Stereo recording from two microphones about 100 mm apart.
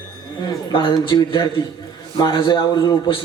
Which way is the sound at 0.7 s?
50° left (ahead or behind).